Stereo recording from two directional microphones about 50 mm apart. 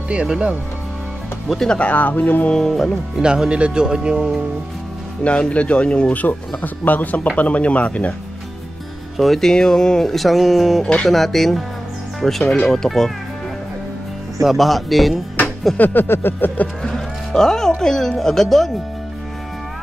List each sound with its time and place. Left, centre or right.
0.3 s speech: right
1.7 s speech: left
2.5 s speech: centre
3.2 s speech: centre
5.2 s speech: left
6.2 s speech: left
9.1 s speech: centre
14.4 s speech: centre
15.8 s speech: left
16.8 s speech: centre